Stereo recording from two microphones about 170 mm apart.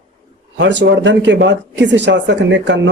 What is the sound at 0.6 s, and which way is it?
Speech, 90° right.